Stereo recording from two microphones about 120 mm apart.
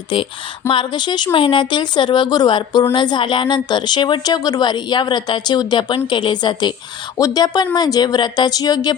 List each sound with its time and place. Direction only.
0.1 s speech: 45° left (ahead or behind)